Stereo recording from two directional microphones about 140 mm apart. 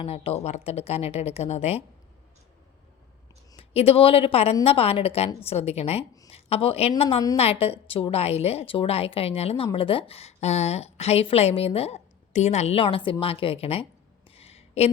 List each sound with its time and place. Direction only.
0.0 s a woman's voice: 45° left (ahead or behind)
3.6 s a woman's voice: 45° left (ahead or behind)
14.3 s a sound: 45° left (ahead or behind)